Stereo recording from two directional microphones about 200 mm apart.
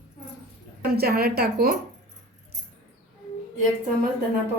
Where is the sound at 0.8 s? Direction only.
50° right (ahead or behind).